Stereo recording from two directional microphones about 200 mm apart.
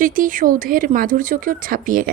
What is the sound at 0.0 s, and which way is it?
Speech, 45° right (ahead or behind).